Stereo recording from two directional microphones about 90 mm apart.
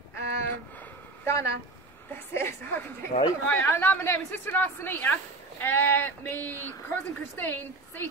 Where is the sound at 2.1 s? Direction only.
25° left (ahead or behind).